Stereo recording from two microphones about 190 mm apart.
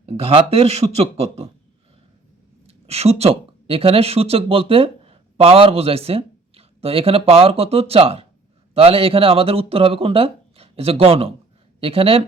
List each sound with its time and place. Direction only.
0.0 s a man's voice: 30° right (ahead or behind)
2.6 s a man's voice: 35° right (ahead or behind)